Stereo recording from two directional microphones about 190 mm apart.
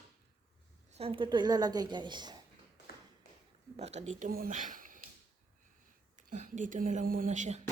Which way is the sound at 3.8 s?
35° right (ahead or behind).